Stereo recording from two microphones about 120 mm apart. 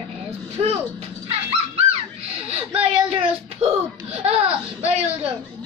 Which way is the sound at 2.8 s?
55° right (ahead or behind).